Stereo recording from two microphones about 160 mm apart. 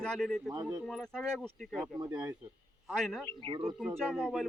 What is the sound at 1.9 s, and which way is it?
Speech, 25° right (ahead or behind).